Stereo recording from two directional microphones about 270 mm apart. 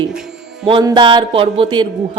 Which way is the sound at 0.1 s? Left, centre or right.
Centre.